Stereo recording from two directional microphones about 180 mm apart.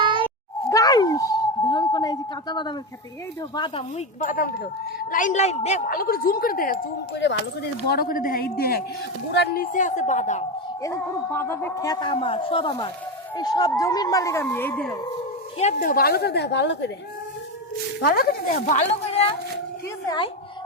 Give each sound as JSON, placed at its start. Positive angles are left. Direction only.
{"t": 0.0, "sound": "a sound", "side_deg": -30}
{"t": 0.7, "sound": "a sound", "side_deg": 20}
{"t": 3.5, "sound": "a man's voice", "side_deg": 25}
{"t": 3.9, "sound": "a man's voice", "side_deg": 45}
{"t": 7.2, "sound": "speech", "side_deg": 75}
{"t": 9.7, "sound": "a man's voice", "side_deg": 45}
{"t": 10.8, "sound": "a man's voice", "side_deg": 15}
{"t": 15.5, "sound": "speech", "side_deg": 45}
{"t": 18.0, "sound": "a man's voice", "side_deg": 55}
{"t": 20.1, "sound": "a man's voice", "side_deg": 25}